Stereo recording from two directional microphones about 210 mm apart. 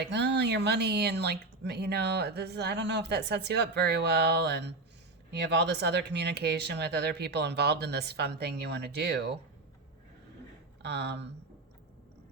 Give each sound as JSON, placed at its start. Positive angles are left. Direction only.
{"t": 0.3, "sound": "speech", "side_deg": -55}
{"t": 10.8, "sound": "speech", "side_deg": -55}